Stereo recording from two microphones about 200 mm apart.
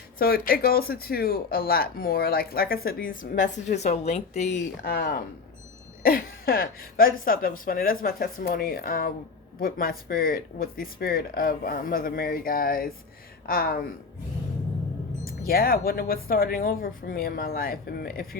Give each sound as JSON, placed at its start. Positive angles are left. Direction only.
{"t": 0.2, "sound": "speech", "side_deg": 50}
{"t": 4.8, "sound": "speech", "side_deg": 50}
{"t": 15.4, "sound": "speech", "side_deg": 50}